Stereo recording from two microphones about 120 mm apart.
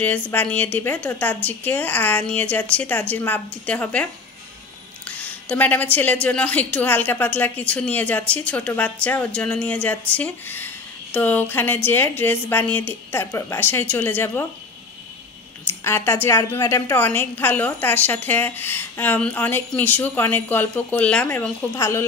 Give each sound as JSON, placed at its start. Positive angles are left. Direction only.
{"t": 0.0, "sound": "a woman's voice", "side_deg": 15}
{"t": 15.8, "sound": "a woman's voice", "side_deg": 20}
{"t": 21.7, "sound": "speech", "side_deg": 25}